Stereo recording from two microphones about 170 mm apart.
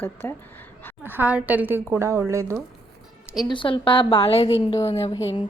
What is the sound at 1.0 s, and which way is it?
A woman's voice, 10° right (ahead or behind).